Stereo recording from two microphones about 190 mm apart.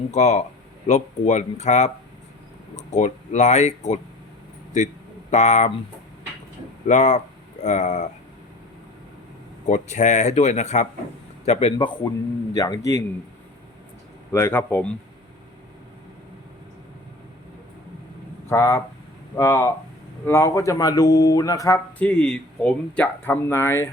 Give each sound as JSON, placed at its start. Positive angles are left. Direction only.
{"t": 0.1, "sound": "speech", "side_deg": 35}
{"t": 5.3, "sound": "speech", "side_deg": 35}
{"t": 6.8, "sound": "speech", "side_deg": 40}
{"t": 9.6, "sound": "speech", "side_deg": 40}
{"t": 12.5, "sound": "speech", "side_deg": 20}
{"t": 14.3, "sound": "speech", "side_deg": 10}
{"t": 18.4, "sound": "speech", "side_deg": 15}